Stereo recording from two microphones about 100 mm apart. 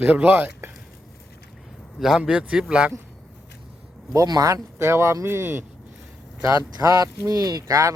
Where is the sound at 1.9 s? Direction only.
5° right (ahead or behind).